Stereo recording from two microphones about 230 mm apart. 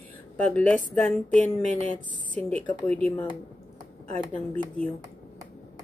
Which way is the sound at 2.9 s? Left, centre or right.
Centre.